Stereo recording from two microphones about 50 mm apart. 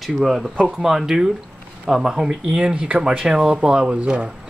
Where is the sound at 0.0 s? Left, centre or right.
Centre.